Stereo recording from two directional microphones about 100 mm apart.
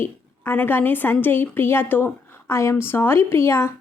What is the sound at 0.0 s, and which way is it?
Speech, 20° left (ahead or behind).